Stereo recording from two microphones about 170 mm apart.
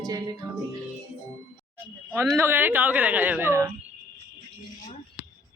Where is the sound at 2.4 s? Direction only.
10° right (ahead or behind).